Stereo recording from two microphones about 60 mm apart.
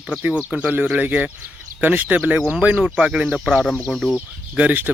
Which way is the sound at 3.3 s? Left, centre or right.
Centre.